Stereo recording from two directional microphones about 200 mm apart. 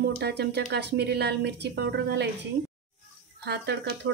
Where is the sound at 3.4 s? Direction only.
60° right (ahead or behind).